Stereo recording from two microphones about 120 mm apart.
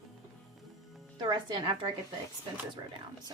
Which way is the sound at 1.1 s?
40° right (ahead or behind).